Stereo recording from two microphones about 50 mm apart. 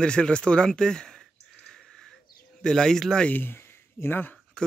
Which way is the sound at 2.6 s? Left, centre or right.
Centre.